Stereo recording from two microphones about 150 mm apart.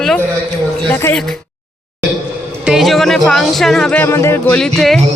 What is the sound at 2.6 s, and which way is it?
Speech, centre (ahead or behind).